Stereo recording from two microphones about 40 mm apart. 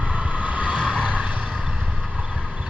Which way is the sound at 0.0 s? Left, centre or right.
Right.